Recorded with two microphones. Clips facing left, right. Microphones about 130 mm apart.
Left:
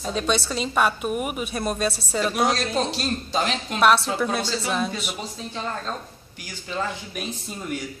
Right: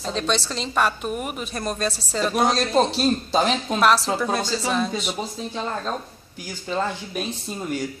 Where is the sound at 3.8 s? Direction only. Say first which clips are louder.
Left 1 dB; centre (ahead or behind).